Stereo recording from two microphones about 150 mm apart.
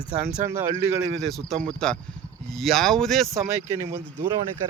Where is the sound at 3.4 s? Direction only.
20° right (ahead or behind).